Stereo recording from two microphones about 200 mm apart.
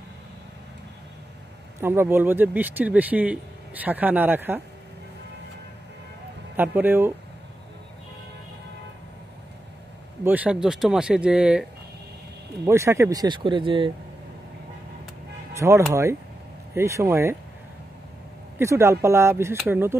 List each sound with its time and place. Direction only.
1.8 s speech: 10° right (ahead or behind)
6.5 s speech: 10° right (ahead or behind)
10.2 s speech: 5° right (ahead or behind)
12.6 s speech: 15° right (ahead or behind)
15.5 s speech: 15° right (ahead or behind)
18.6 s speech: 15° right (ahead or behind)